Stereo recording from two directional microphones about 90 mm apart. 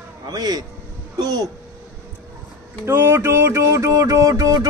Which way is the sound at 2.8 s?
30° right (ahead or behind).